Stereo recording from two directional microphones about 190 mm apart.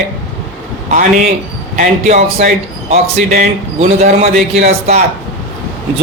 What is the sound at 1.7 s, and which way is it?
A man's voice, 40° right (ahead or behind).